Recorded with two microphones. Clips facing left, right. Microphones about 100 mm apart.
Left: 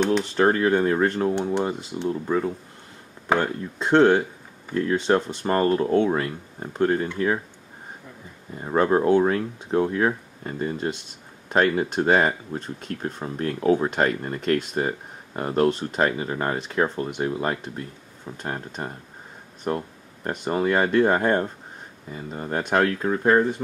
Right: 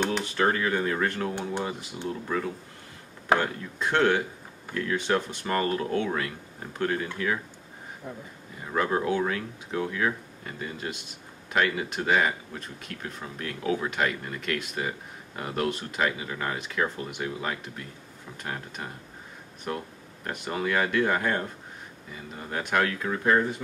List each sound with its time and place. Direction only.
0.4 s speech: 30° left (ahead or behind)
8.5 s speech: 35° left (ahead or behind)
22.7 s speech: 30° left (ahead or behind)